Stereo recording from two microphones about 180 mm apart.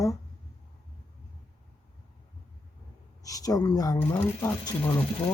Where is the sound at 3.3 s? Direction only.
20° left (ahead or behind).